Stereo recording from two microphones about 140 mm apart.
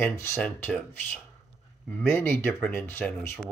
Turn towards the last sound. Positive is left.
turn(degrees=15)  # may be behind; listen again after turning